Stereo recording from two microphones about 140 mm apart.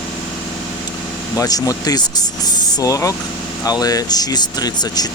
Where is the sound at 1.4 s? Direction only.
25° left (ahead or behind).